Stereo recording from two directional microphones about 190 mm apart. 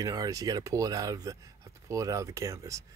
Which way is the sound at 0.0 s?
20° right (ahead or behind).